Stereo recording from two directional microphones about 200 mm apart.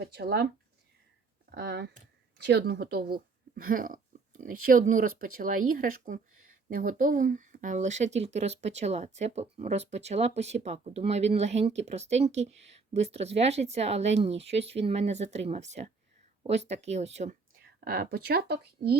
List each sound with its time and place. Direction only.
0.0 s speech: 55° right (ahead or behind); by 17.3 s 35° right (ahead or behind)
17.6 s speech: 50° right (ahead or behind)